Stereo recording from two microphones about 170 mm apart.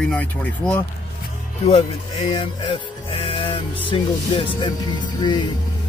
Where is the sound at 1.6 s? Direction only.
35° left (ahead or behind).